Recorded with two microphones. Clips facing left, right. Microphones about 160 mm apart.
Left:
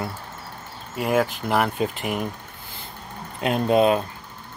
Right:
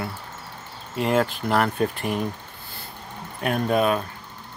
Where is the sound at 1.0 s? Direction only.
5° left (ahead or behind).